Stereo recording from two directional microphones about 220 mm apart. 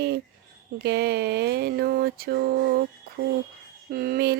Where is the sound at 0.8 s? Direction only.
50° right (ahead or behind).